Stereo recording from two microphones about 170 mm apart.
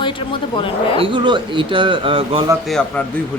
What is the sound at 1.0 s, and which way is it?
A man's voice, 30° right (ahead or behind).